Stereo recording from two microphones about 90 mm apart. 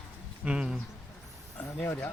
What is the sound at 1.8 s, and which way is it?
Speech, 20° left (ahead or behind).